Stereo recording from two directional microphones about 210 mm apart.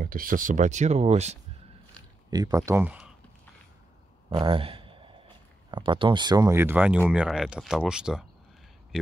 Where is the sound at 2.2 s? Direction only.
20° right (ahead or behind).